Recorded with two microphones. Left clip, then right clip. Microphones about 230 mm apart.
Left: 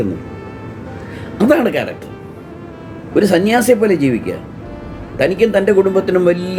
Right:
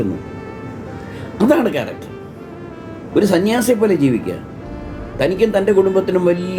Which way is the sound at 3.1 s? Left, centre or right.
Centre.